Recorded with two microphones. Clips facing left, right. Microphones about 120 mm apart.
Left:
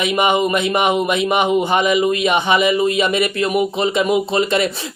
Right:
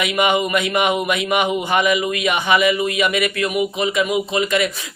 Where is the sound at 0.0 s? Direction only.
25° left (ahead or behind).